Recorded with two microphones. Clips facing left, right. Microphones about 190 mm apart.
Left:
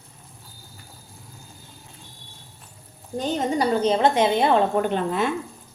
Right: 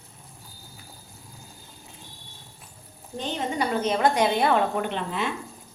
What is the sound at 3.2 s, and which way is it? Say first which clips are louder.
A woman's voice: left 5 dB; 40° left (ahead or behind).